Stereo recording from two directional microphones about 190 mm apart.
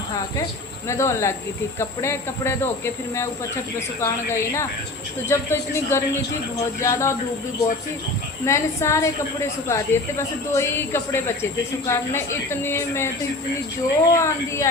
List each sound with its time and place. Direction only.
0.9 s speech: 15° left (ahead or behind)
8.4 s speech: 15° left (ahead or behind)